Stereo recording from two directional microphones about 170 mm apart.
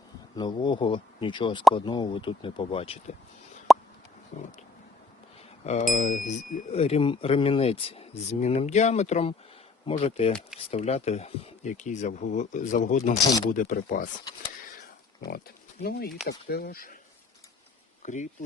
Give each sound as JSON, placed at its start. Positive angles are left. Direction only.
{"t": 0.3, "sound": "speech", "side_deg": 25}
{"t": 3.7, "sound": "plop", "side_deg": 0}
{"t": 4.3, "sound": "speech", "side_deg": 45}
{"t": 5.9, "sound": "speech", "side_deg": 50}
{"t": 15.8, "sound": "speech", "side_deg": 65}
{"t": 18.0, "sound": "speech", "side_deg": 45}